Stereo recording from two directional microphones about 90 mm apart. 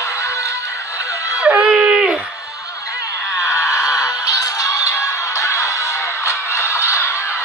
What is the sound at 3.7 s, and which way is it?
Music, 45° left (ahead or behind).